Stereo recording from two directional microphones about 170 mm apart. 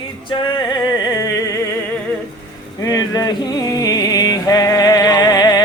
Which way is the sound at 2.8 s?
20° left (ahead or behind).